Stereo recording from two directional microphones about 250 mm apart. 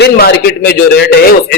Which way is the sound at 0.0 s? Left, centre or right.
Left.